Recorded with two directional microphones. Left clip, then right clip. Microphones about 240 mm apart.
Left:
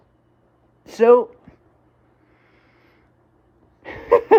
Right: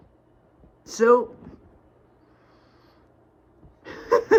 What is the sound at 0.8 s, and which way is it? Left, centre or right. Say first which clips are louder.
Speech: left 5 dB; centre.